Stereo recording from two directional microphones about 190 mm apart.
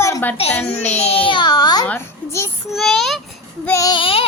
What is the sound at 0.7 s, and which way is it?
A child's voice, 35° left (ahead or behind).